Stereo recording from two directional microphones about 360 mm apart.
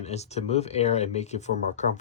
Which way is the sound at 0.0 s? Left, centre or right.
Centre.